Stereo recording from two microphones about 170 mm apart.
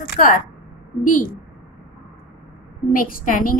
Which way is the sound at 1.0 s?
50° left (ahead or behind).